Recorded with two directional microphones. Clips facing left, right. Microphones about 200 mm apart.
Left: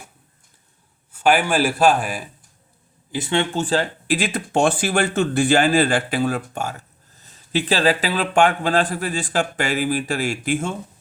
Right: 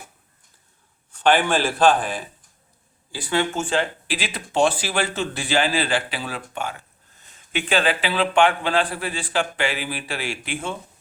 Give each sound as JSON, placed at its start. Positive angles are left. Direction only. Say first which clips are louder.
{"t": 1.1, "sound": "a man's voice", "louder": "left 1 dB", "side_deg": 10}
{"t": 3.1, "sound": "speech", "louder": "left 2 dB", "side_deg": 25}